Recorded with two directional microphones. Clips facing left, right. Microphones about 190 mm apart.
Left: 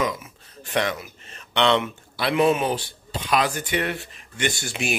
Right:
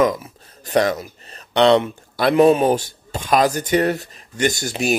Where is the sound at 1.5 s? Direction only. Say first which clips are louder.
Right 6 dB; 35° right (ahead or behind).